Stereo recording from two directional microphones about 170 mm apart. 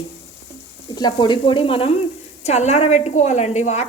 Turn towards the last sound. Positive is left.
turn(degrees=45)  # may be behind; listen again after turning